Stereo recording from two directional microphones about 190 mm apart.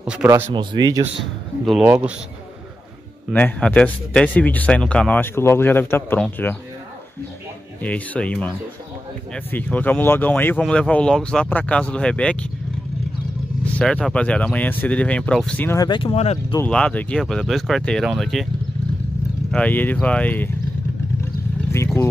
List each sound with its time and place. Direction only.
0.0 s speech: 5° right (ahead or behind)
0.3 s speech: 20° right (ahead or behind)
1.7 s speech: 5° right (ahead or behind)
3.3 s speech: 5° left (ahead or behind)
7.8 s speech: 5° left (ahead or behind)
13.7 s speech: centre (ahead or behind); by 16.5 s 30° left (ahead or behind)
16.6 s speech: 5° left (ahead or behind)
19.5 s speech: 10° left (ahead or behind)
21.7 s speech: 15° left (ahead or behind)